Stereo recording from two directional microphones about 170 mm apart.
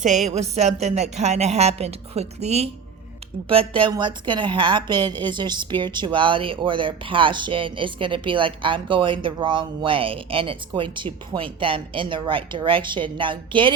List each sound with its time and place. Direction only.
0.0 s a woman's voice: 45° right (ahead or behind); by 13.7 s 30° right (ahead or behind)